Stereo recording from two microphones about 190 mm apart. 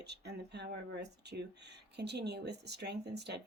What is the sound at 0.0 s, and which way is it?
Speech, 60° right (ahead or behind).